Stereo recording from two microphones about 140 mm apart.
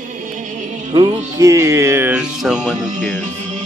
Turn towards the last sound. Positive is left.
turn(degrees=-15)  # may be behind; listen again after turning